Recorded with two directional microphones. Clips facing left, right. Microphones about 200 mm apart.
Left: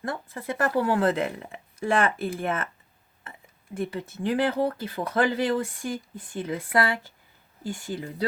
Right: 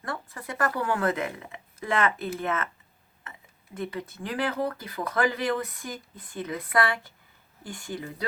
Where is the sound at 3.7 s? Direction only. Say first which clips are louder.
Left 3 dB; 30° left (ahead or behind).